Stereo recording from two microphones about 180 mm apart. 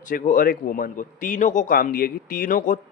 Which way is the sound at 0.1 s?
50° left (ahead or behind).